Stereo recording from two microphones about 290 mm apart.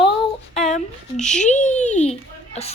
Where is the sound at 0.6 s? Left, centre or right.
Left.